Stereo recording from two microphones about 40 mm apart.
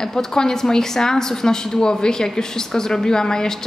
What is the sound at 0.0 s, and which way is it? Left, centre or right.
A woman's voice, centre.